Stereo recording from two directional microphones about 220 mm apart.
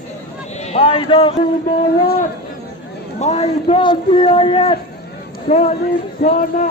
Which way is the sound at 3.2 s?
30° left (ahead or behind).